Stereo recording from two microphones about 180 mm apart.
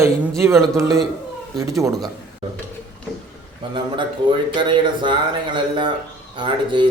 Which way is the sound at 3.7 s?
25° right (ahead or behind).